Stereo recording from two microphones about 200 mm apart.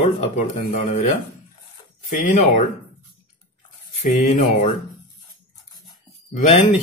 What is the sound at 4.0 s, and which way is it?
Speech, 35° left (ahead or behind).